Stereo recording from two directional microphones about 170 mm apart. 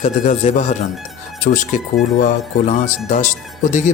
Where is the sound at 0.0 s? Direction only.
45° left (ahead or behind).